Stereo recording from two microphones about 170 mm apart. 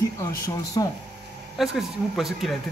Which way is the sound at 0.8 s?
25° left (ahead or behind).